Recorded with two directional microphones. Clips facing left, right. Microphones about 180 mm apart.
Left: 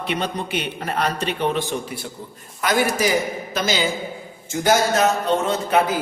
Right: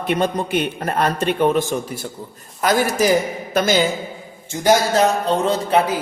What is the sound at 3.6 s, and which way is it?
Speech, 55° right (ahead or behind).